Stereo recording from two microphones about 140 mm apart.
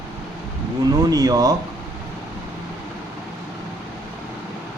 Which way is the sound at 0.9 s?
25° right (ahead or behind).